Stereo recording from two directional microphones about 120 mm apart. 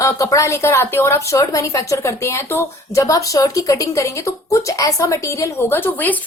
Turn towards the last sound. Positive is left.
turn(degrees=15)  # may be behind; listen again after turning